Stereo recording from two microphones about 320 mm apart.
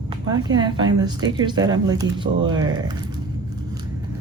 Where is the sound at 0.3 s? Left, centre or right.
Centre.